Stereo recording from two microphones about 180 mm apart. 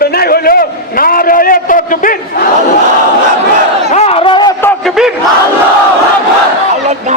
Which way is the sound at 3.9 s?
35° left (ahead or behind).